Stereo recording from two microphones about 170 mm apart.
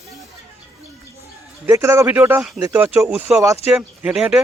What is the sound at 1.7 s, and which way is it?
Speech, 15° right (ahead or behind).